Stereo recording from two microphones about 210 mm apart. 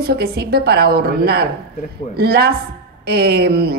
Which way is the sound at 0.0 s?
45° right (ahead or behind).